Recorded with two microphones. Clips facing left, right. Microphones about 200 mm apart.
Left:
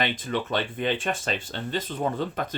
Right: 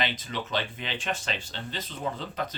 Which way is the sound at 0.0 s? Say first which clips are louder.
Left 5 dB; 50° left (ahead or behind).